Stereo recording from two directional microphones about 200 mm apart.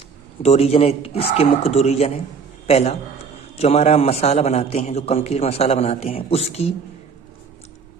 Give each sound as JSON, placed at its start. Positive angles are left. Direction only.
{"t": 0.4, "sound": "a man's voice", "side_deg": 30}